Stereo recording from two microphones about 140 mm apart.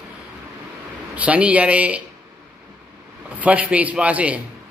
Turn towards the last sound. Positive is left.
turn(degrees=-10)  # may be behind; listen again after turning